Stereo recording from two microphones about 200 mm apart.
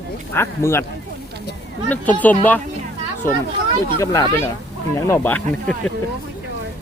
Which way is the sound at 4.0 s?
15° left (ahead or behind).